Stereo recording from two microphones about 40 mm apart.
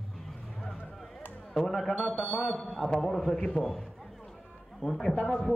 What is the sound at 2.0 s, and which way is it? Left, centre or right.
Speech, left.